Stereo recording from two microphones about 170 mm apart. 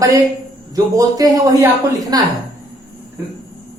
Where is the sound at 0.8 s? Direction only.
20° right (ahead or behind).